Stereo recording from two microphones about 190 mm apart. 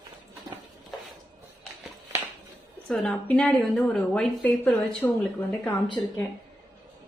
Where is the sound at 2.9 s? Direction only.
5° left (ahead or behind).